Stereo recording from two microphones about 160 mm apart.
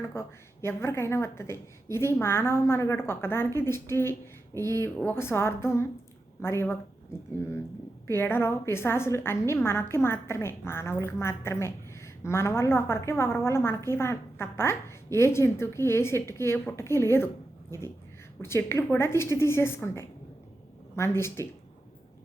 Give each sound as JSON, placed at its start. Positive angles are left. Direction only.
{"t": 0.1, "sound": "a woman's voice", "side_deg": 15}
{"t": 8.0, "sound": "a woman's voice", "side_deg": 15}